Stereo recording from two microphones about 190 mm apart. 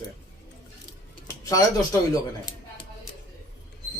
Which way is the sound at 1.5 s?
20° left (ahead or behind).